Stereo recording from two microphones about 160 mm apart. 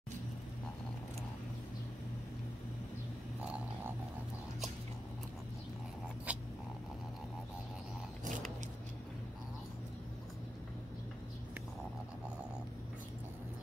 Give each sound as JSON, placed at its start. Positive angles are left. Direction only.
{"t": 6.3, "sound": "cat", "side_deg": -10}